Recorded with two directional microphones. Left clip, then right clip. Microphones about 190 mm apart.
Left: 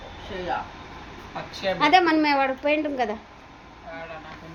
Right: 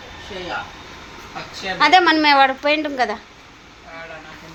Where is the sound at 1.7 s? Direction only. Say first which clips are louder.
Right 6 dB; 5° right (ahead or behind).